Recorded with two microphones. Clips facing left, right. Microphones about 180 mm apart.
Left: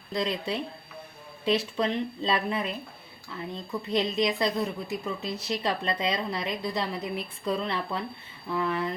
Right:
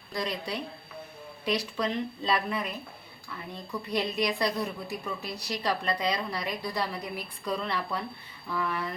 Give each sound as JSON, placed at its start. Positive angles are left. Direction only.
{"t": 0.1, "sound": "a woman's voice", "side_deg": 25}